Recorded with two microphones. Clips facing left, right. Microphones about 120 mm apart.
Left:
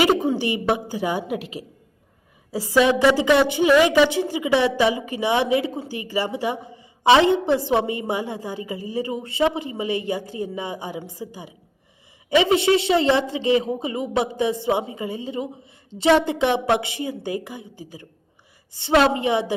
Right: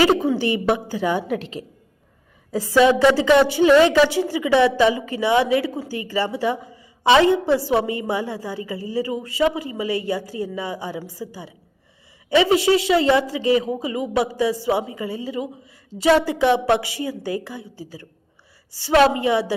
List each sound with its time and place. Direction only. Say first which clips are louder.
0.2 s a woman's voice: right 2 dB; 15° left (ahead or behind)